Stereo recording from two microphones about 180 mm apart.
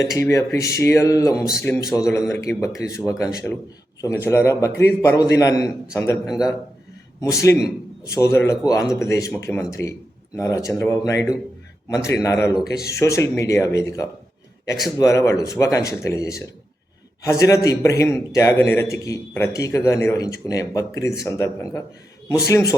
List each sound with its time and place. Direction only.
0.2 s a man's voice: 15° left (ahead or behind)
4.0 s a man's voice: 15° left (ahead or behind)
7.2 s a man's voice: 15° left (ahead or behind)
9.8 s a man's voice: 80° left
10.3 s a man's voice: 15° left (ahead or behind)